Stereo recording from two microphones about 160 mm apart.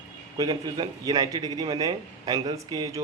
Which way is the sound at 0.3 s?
25° right (ahead or behind).